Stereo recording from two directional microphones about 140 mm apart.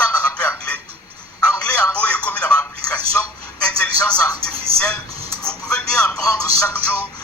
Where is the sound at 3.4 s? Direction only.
5° left (ahead or behind).